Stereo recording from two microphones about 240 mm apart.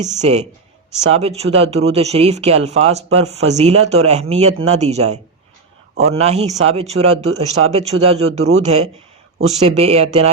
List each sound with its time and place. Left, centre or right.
0.2 s speech: right